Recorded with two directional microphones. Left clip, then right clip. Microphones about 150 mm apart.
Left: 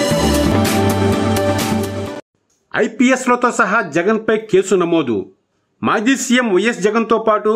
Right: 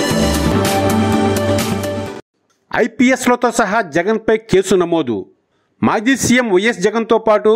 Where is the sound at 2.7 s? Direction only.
35° right (ahead or behind).